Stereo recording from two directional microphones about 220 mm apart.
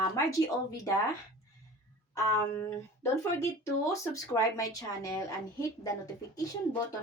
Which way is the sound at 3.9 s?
15° left (ahead or behind).